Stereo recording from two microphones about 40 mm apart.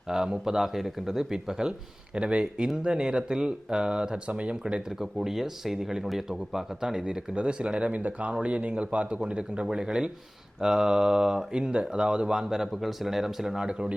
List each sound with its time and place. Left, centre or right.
0.1 s speech: centre
4.3 s speech: right
4.9 s speech: centre; by 7.9 s right
7.9 s speech: right; by 13.7 s centre
13.7 s speech: right